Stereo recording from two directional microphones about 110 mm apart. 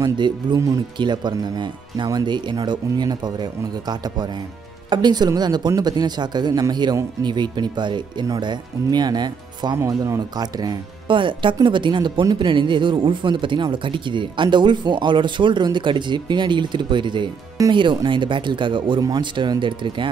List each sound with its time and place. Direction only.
0.0 s speech: 45° right (ahead or behind)